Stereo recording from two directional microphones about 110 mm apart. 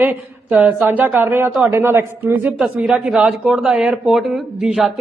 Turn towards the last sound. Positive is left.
turn(degrees=-5)  # may be behind; listen again after turning